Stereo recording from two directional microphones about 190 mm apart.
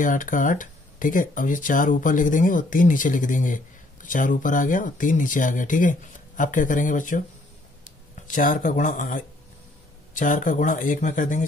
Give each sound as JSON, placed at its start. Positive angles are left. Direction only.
{"t": 0.0, "sound": "speech", "side_deg": 45}
{"t": 8.3, "sound": "speech", "side_deg": 45}